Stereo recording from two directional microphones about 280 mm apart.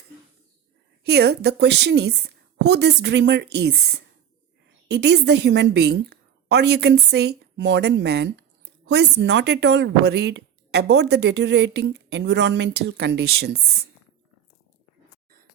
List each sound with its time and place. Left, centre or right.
1.0 s a woman's voice: right